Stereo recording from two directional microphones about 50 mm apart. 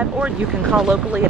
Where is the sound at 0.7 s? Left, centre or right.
Centre.